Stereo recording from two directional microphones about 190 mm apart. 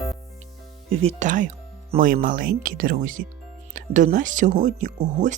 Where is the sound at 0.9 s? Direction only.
35° right (ahead or behind).